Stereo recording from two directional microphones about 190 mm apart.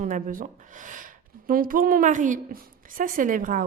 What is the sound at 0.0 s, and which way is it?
Speech, 45° right (ahead or behind).